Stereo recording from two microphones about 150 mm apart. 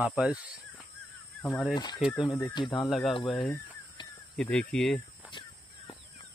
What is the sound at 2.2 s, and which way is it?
Speech, 10° left (ahead or behind).